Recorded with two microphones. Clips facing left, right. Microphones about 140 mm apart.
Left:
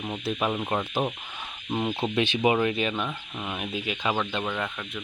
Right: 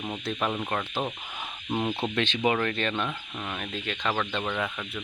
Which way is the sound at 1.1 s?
10° right (ahead or behind).